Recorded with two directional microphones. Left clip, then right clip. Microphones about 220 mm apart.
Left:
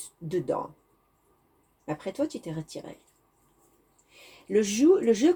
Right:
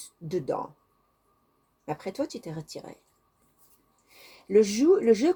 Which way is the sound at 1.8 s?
40° right (ahead or behind).